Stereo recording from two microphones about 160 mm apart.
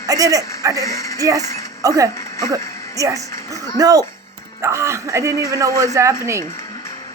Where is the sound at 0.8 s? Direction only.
20° left (ahead or behind).